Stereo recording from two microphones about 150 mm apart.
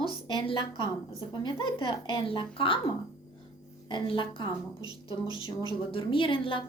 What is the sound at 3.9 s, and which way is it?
Speech, 35° left (ahead or behind).